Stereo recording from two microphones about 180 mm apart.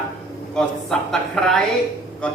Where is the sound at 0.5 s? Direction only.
5° left (ahead or behind).